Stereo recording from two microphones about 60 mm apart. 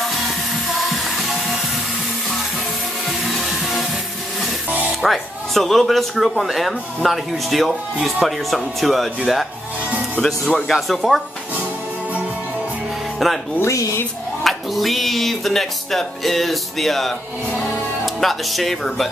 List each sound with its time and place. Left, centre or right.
0.7 s music: centre
3.1 s music: centre
5.0 s speech: centre
9.8 s music: right
10.2 s speech: centre
13.2 s speech: centre
13.6 s speech: left
14.4 s speech: centre